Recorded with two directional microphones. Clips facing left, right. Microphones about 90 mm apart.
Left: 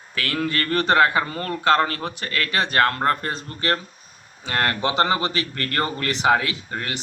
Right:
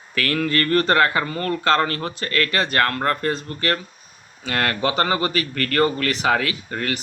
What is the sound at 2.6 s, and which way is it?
Speech, 20° left (ahead or behind).